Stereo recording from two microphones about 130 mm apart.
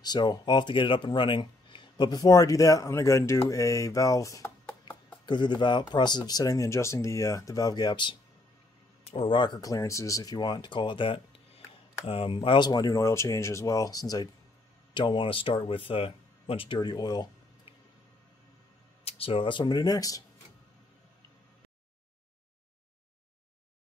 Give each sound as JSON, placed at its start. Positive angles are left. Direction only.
{"t": 0.0, "sound": "speech", "side_deg": 30}
{"t": 4.8, "sound": "speech", "side_deg": 35}
{"t": 15.0, "sound": "speech", "side_deg": 40}
{"t": 19.0, "sound": "speech", "side_deg": 45}